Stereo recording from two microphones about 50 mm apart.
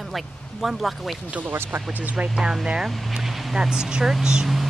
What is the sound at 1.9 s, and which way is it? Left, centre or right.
Speech, right.